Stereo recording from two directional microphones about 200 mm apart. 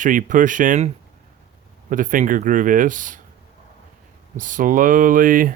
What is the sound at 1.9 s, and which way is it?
Speech, 40° right (ahead or behind).